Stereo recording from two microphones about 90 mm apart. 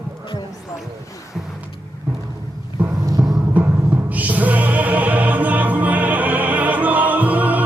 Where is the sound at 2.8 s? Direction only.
20° right (ahead or behind).